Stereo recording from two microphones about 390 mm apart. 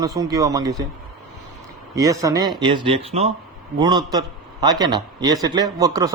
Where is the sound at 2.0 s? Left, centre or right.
Centre.